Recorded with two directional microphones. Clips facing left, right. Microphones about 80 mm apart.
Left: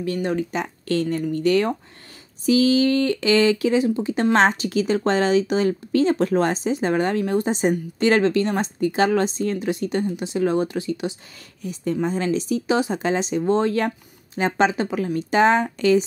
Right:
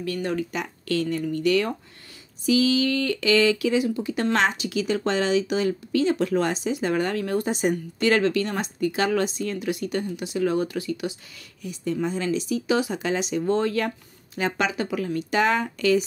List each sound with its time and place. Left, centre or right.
0.0 s speech: left
11.6 s speech: left